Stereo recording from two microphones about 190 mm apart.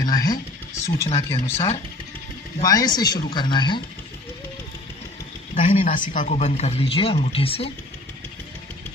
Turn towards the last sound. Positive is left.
turn(degrees=30)  # may be behind; listen again after turning